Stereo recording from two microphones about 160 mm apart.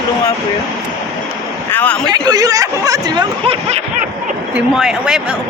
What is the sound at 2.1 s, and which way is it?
Speech, 25° right (ahead or behind).